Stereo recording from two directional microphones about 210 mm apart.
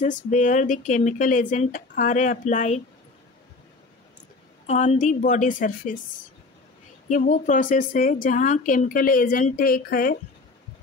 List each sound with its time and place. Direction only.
0.0 s a woman's voice: 35° left (ahead or behind)
4.6 s a woman's voice: 35° left (ahead or behind)
7.1 s a woman's voice: 35° left (ahead or behind)